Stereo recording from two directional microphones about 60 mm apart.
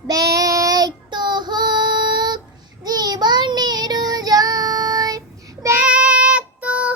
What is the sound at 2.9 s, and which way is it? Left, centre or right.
Child singing, right.